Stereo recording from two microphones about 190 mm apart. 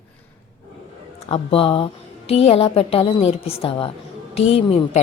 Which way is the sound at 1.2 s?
30° left (ahead or behind).